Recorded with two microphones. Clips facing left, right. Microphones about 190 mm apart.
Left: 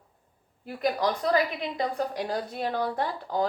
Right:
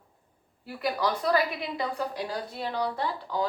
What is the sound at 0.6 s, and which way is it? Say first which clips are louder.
A woman's voice: left 2 dB; 50° left (ahead or behind).